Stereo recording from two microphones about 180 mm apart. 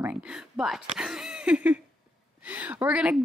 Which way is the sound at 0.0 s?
5° right (ahead or behind).